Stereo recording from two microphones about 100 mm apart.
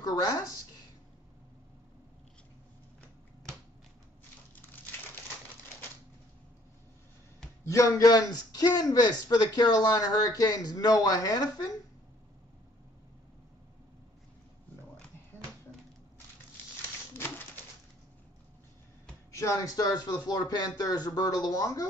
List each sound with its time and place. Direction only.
0.0 s a woman's voice: 40° left (ahead or behind)
7.6 s a man's voice: 30° left (ahead or behind)
19.3 s a man's voice: 35° left (ahead or behind)